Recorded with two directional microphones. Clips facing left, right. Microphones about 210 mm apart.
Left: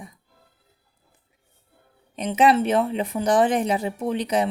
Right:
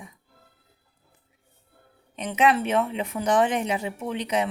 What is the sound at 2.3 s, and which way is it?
Speech, 30° left (ahead or behind).